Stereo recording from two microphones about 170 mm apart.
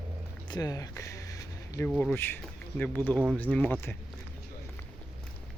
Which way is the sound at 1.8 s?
5° left (ahead or behind).